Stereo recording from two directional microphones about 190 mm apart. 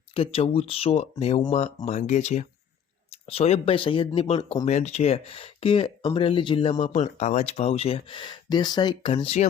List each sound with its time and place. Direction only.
0.1 s speech: 30° left (ahead or behind)
4.6 s speech: 35° left (ahead or behind)